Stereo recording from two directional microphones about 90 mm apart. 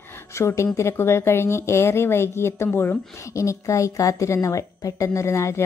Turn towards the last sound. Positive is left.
turn(degrees=30)  # may be behind; listen again after turning